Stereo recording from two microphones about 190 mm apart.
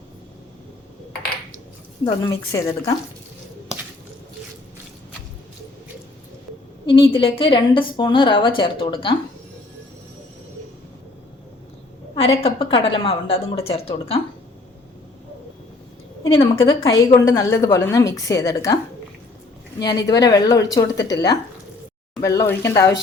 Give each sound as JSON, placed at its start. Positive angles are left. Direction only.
{"t": 2.2, "sound": "a woman's voice", "side_deg": 15}
{"t": 6.8, "sound": "a woman's voice", "side_deg": 25}
{"t": 12.1, "sound": "a woman's voice", "side_deg": 30}
{"t": 16.3, "sound": "a woman's voice", "side_deg": 30}
{"t": 19.8, "sound": "a woman's voice", "side_deg": 20}